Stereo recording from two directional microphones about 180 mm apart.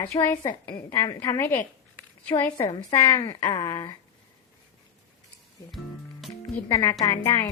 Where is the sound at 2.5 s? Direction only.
20° left (ahead or behind).